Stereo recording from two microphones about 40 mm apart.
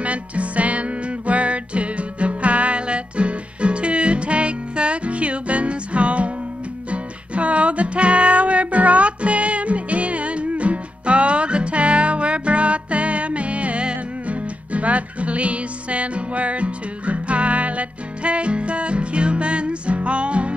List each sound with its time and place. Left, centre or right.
0.0 s music: right